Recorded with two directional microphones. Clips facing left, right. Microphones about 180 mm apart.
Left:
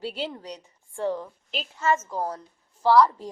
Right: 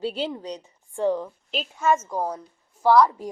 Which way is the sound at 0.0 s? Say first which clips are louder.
Right 4 dB; 20° right (ahead or behind).